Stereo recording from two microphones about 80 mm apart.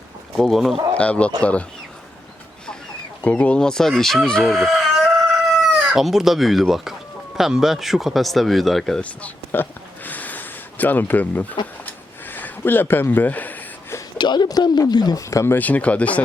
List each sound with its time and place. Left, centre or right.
0.3 s speech: centre
0.9 s speech: centre
3.2 s speech: centre
9.0 s a sound: centre
14.2 s speech: left
15.2 s speech: left
15.5 s speech: centre